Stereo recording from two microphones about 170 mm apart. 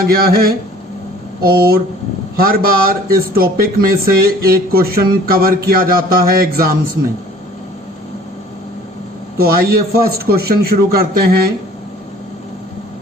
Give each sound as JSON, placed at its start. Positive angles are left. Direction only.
{"t": 0.3, "sound": "a man's voice", "side_deg": -65}
{"t": 9.4, "sound": "a man's voice", "side_deg": -65}